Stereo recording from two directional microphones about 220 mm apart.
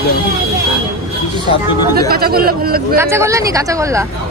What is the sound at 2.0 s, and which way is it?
Speech, 45° right (ahead or behind).